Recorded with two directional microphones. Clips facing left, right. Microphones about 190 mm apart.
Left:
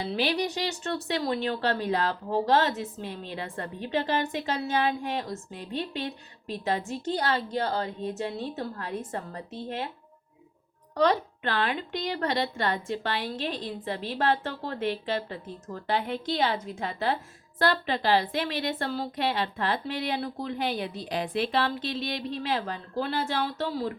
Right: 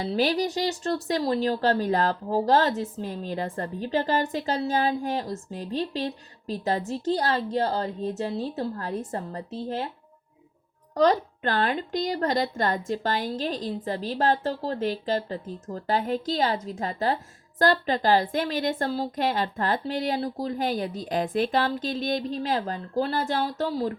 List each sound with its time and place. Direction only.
0.0 s speech: 45° right (ahead or behind)
10.9 s a woman's voice: 45° right (ahead or behind)